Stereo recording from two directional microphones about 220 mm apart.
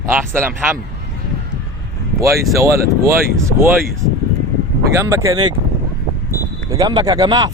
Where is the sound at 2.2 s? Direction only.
15° right (ahead or behind).